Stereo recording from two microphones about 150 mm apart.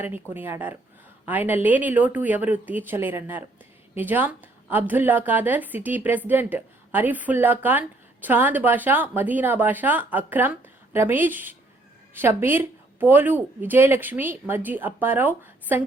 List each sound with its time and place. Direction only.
0.0 s a woman's voice: 15° right (ahead or behind)